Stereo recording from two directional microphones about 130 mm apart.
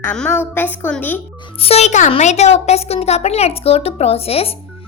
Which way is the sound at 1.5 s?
50° left (ahead or behind).